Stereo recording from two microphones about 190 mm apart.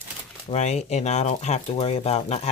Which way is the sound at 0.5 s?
35° left (ahead or behind).